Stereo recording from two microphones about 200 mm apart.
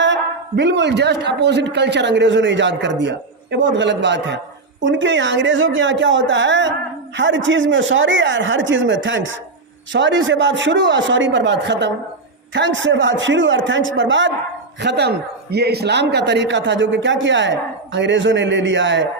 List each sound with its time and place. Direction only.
0.0 s a man's voice: 60° right (ahead or behind)
14.8 s a man's voice: 60° right (ahead or behind)